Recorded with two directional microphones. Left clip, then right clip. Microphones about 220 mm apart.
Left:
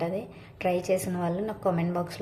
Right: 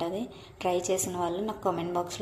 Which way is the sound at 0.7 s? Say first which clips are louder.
Left 1 dB; 30° right (ahead or behind).